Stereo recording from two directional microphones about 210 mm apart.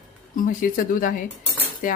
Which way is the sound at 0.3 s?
40° left (ahead or behind).